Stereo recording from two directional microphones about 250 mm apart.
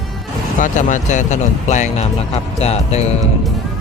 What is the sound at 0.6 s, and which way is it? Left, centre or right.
Speech, left.